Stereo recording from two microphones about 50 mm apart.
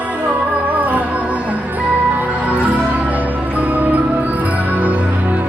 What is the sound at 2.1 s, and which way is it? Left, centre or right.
Music, right.